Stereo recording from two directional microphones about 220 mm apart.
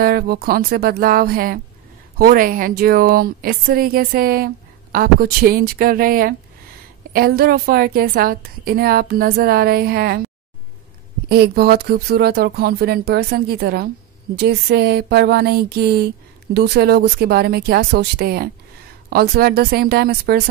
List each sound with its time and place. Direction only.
0.0 s a woman's voice: 45° right (ahead or behind)
11.2 s a woman's voice: 45° right (ahead or behind)